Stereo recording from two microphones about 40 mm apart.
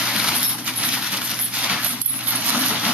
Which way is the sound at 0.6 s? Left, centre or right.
Right.